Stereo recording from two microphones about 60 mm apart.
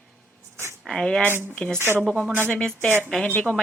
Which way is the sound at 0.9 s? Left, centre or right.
Centre.